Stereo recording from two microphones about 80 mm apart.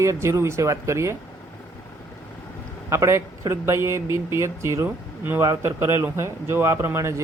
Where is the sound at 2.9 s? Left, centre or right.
Right.